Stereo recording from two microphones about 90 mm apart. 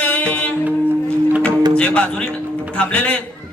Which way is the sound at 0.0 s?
15° left (ahead or behind).